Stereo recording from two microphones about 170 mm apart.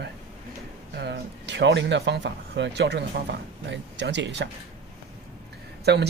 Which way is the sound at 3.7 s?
90° right.